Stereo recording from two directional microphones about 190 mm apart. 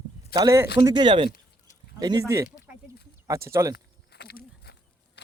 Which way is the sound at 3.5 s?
15° right (ahead or behind).